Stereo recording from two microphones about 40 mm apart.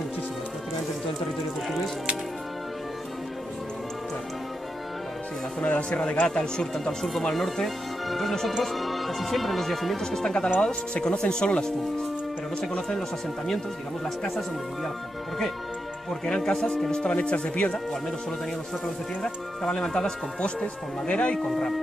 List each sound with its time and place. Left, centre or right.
5.6 s speech: left; by 10.2 s centre
10.2 s speech: centre
16.1 s speech: centre
17.2 s speech: left
19.2 s speech: centre
21.4 s speech: centre